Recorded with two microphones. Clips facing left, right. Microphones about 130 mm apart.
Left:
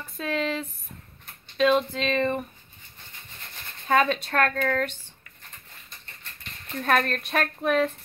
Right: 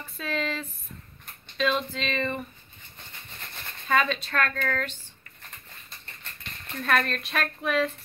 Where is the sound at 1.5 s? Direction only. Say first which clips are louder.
Left 5 dB; 45° left (ahead or behind).